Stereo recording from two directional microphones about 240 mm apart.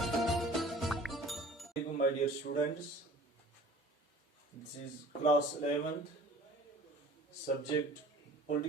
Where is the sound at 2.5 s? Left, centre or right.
Left.